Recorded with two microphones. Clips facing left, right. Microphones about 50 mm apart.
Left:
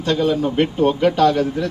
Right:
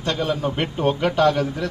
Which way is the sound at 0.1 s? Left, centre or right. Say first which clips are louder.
Left 5 dB; centre.